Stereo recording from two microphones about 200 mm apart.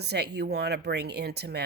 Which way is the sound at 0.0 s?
55° right (ahead or behind).